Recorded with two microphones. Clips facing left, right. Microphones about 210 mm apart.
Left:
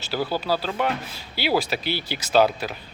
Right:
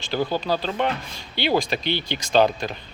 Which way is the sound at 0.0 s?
5° left (ahead or behind).